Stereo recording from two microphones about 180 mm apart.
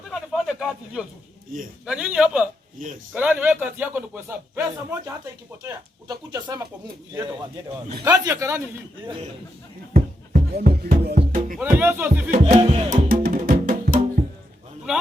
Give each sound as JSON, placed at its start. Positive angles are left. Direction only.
{"t": 0.1, "sound": "a sound", "side_deg": 0}
{"t": 1.8, "sound": "a man's voice", "side_deg": -5}
{"t": 9.9, "sound": "music", "side_deg": -55}
{"t": 11.6, "sound": "speech", "side_deg": -10}
{"t": 12.3, "sound": "speech", "side_deg": -35}
{"t": 13.1, "sound": "music", "side_deg": -50}
{"t": 14.9, "sound": "speech", "side_deg": -5}